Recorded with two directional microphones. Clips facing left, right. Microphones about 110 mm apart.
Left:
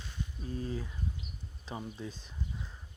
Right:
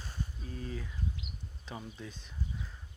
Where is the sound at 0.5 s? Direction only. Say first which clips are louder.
Left 4 dB; 30° left (ahead or behind).